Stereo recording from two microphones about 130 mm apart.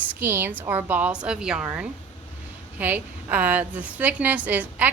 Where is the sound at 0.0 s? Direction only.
10° right (ahead or behind).